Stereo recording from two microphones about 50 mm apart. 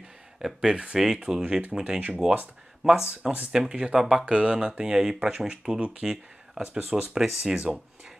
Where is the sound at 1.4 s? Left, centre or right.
Right.